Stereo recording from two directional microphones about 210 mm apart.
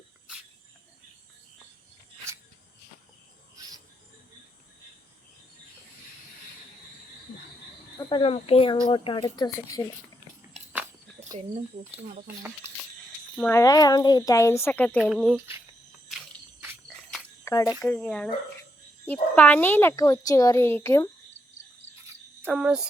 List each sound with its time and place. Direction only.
3.6 s a sound: 15° right (ahead or behind)
7.9 s speech: 25° left (ahead or behind)
13.3 s a child's voice: 10° left (ahead or behind)
16.9 s cricket: centre (ahead or behind)
17.4 s cricket: 15° left (ahead or behind)
17.8 s a child's voice: 5° left (ahead or behind)
22.4 s cricket: 5° right (ahead or behind)